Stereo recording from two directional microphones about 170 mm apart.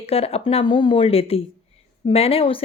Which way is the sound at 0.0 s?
35° left (ahead or behind).